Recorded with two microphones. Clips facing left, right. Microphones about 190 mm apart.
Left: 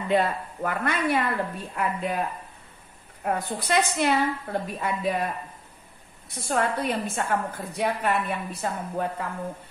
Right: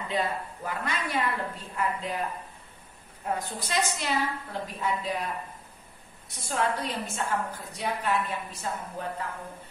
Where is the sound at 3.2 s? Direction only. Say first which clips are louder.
Left 4 dB; 60° left (ahead or behind).